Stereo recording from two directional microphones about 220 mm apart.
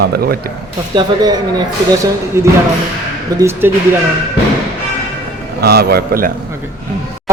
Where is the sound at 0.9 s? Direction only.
20° right (ahead or behind).